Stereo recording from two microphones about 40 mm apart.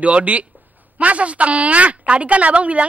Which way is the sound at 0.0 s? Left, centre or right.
Right.